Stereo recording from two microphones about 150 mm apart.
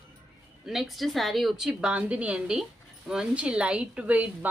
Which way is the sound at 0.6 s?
Centre (ahead or behind).